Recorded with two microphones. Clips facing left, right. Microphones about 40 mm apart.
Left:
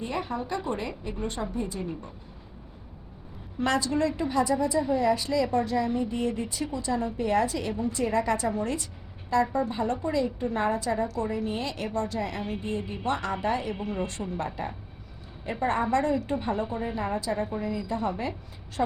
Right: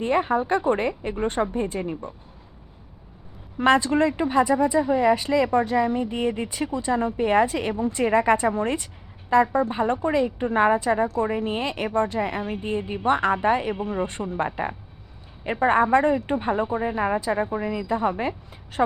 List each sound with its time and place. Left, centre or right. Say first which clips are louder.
0.0 s a woman's voice: right 9 dB; right
3.6 s a woman's voice: right 7 dB; right